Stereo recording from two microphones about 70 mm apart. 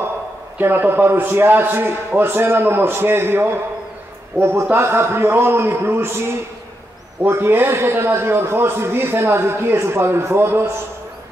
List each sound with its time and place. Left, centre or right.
0.6 s a man's voice: right